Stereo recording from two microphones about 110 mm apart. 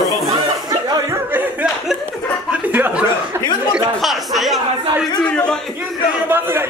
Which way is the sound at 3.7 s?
Centre (ahead or behind).